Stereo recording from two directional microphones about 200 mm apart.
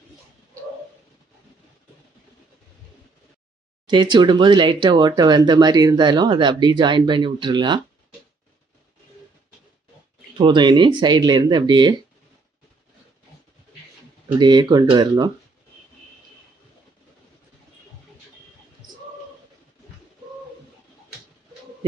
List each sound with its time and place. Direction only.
3.8 s speech: 20° right (ahead or behind)
10.3 s speech: 20° right (ahead or behind)
14.3 s speech: 20° right (ahead or behind)